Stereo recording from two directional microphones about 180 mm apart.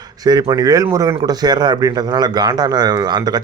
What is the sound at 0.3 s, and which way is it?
Speech, 20° right (ahead or behind).